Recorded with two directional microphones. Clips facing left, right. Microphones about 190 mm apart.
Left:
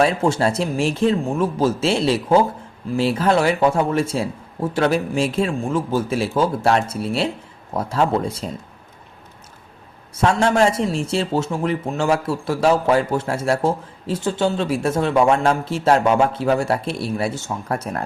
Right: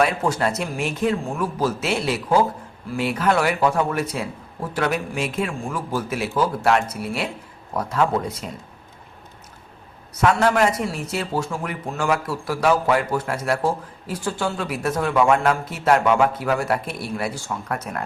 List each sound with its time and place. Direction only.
0.0 s a man's voice: 30° left (ahead or behind)
10.2 s a man's voice: 25° left (ahead or behind)